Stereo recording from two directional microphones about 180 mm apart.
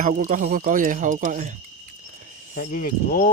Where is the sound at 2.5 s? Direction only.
45° left (ahead or behind).